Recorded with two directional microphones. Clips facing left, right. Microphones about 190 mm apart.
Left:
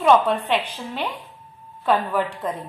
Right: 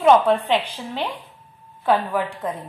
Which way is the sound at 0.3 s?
10° right (ahead or behind).